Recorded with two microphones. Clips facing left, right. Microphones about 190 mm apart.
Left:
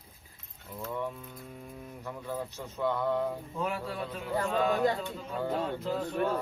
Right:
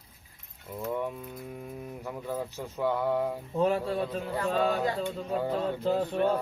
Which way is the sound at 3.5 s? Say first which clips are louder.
Right 7 dB; 35° right (ahead or behind).